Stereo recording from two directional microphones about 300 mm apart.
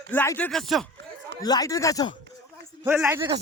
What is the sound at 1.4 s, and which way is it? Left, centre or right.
Speech, centre.